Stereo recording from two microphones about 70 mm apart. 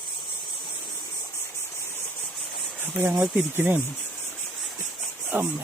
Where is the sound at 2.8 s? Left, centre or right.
Right.